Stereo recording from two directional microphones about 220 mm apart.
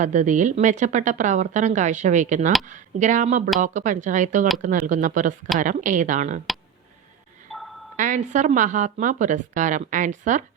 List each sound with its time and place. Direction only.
0.0 s speech: 35° right (ahead or behind)
7.5 s a sound: centre (ahead or behind)
7.9 s speech: 35° right (ahead or behind)